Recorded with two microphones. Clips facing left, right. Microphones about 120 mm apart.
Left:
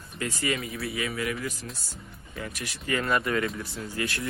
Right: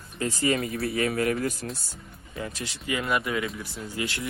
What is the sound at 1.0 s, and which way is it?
Speech, 50° right (ahead or behind).